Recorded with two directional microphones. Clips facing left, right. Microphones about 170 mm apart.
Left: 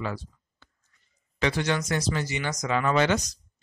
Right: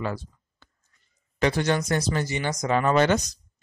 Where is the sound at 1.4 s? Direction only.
45° right (ahead or behind).